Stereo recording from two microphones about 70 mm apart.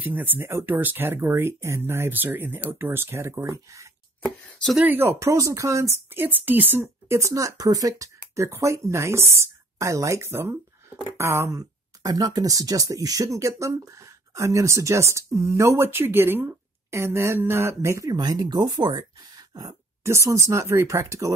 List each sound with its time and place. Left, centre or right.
0.0 s speech: right
4.8 s speech: right
5.2 s speech: right
7.1 s speech: right
10.2 s speech: right
12.0 s speech: right
18.1 s speech: right
20.0 s speech: right